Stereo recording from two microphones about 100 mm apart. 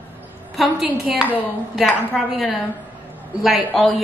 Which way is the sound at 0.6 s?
5° right (ahead or behind).